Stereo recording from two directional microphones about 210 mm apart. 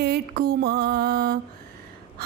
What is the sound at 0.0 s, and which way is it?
Mantra, 45° right (ahead or behind).